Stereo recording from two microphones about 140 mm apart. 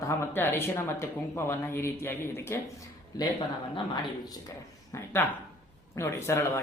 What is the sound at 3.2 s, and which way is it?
Speech, 30° left (ahead or behind).